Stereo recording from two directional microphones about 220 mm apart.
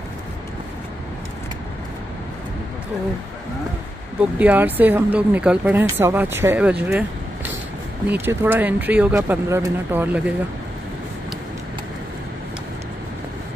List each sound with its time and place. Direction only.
4.4 s speech: 10° right (ahead or behind)